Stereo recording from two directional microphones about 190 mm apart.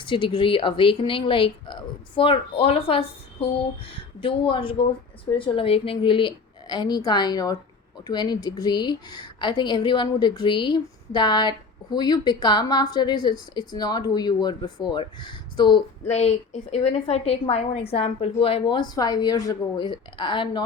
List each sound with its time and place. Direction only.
0.0 s a woman's voice: 25° left (ahead or behind)
16.0 s a woman's voice: 35° left (ahead or behind)